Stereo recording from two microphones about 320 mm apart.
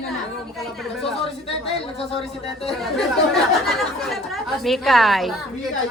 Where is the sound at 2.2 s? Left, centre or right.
Centre.